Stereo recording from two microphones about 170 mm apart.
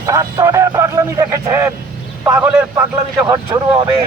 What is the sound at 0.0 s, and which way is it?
A man's voice, 20° right (ahead or behind).